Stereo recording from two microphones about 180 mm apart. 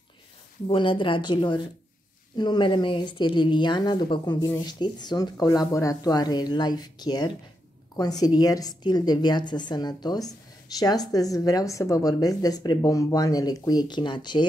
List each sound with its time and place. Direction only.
0.7 s a woman's voice: 30° left (ahead or behind)